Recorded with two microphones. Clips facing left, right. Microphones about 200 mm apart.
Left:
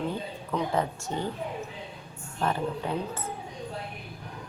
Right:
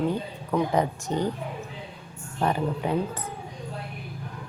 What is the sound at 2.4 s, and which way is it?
Speech, 15° right (ahead or behind).